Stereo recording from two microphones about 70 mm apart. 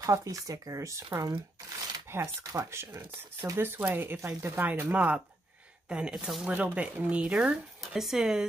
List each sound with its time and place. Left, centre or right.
0.0 s speech: right
2.0 s shuffling cards: right
2.5 s speech: right
3.5 s speech: right
4.8 s speech: centre
6.5 s speech: right
7.8 s speech: centre